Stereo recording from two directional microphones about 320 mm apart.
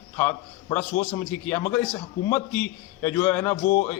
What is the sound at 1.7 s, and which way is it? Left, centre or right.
A man's voice, centre.